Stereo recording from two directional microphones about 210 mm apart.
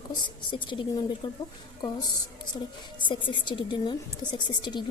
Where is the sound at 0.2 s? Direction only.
25° left (ahead or behind).